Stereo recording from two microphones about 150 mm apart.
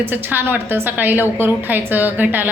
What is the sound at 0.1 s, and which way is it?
A woman's voice, 15° right (ahead or behind).